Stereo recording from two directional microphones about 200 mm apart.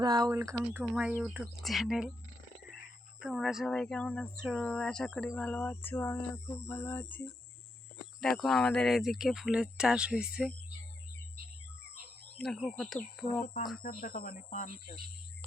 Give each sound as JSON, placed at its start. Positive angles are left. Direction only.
{"t": 0.0, "sound": "speech", "side_deg": -20}
{"t": 3.2, "sound": "speech", "side_deg": 0}
{"t": 8.2, "sound": "speech", "side_deg": 0}
{"t": 12.4, "sound": "speech", "side_deg": 5}
{"t": 13.8, "sound": "speech", "side_deg": 45}